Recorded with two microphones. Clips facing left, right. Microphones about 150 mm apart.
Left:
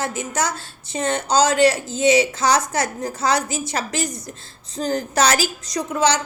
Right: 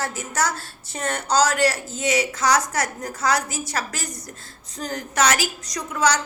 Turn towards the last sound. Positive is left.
turn(degrees=25)  # may be behind; listen again after turning